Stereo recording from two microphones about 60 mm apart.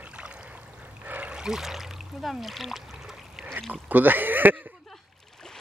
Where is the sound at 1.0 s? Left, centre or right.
Right.